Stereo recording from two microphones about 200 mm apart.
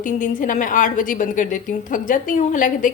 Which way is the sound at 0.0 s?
40° left (ahead or behind).